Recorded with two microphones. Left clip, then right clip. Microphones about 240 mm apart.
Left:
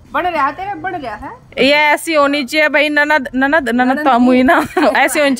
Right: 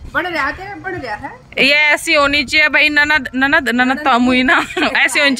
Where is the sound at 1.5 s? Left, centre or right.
Centre.